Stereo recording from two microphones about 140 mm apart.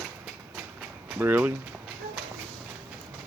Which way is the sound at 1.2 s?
15° right (ahead or behind).